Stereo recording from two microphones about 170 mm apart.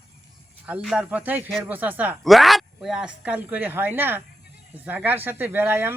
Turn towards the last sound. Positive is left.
turn(degrees=-15)  # may be behind; listen again after turning